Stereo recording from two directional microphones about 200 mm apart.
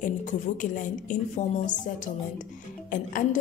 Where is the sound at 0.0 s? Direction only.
40° left (ahead or behind).